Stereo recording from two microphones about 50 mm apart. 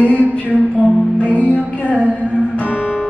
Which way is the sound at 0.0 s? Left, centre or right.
Left.